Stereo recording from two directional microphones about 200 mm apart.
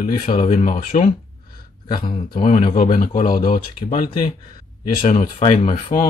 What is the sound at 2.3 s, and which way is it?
Speech, 40° left (ahead or behind).